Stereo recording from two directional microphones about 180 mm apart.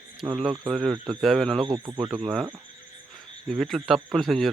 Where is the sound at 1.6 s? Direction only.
25° right (ahead or behind).